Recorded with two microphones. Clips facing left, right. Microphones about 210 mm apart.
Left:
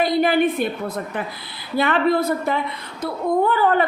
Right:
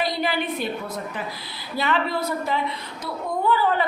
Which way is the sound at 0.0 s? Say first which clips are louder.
Left 8 dB; 50° left (ahead or behind).